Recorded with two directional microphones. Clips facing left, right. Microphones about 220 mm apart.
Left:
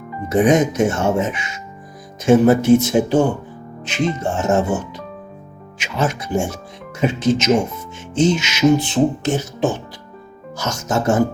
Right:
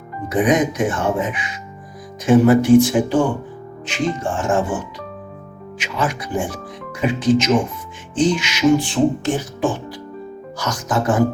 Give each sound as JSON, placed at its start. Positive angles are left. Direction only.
{"t": 0.3, "sound": "speech", "side_deg": 25}
{"t": 6.0, "sound": "speech", "side_deg": 25}